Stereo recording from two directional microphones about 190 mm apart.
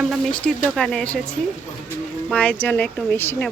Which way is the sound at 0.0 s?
Centre (ahead or behind).